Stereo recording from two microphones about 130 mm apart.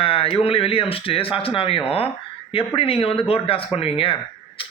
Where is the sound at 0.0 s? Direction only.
45° left (ahead or behind).